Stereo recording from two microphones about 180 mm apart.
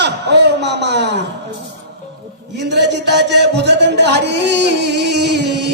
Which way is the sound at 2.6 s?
75° right (ahead or behind).